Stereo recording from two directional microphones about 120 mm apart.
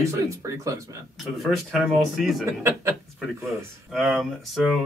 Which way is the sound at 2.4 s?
25° right (ahead or behind).